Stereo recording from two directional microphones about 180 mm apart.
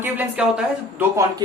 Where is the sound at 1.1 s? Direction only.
20° right (ahead or behind).